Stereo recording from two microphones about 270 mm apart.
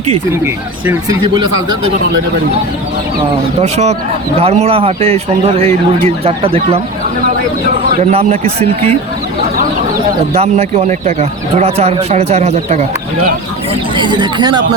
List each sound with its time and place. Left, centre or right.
0.4 s speech: centre
3.6 s a man's voice: right
8.1 s a man's voice: right
10.3 s a man's voice: right
13.9 s speech: centre